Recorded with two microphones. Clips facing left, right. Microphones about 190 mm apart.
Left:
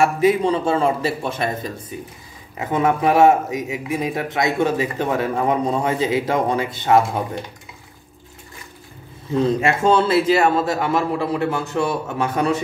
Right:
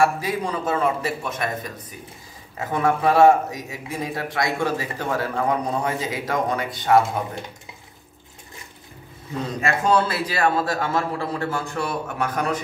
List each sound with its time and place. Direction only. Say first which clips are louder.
0.0 s speech: left 5 dB; 20° left (ahead or behind)
9.6 s speech: right 1 dB; 25° left (ahead or behind)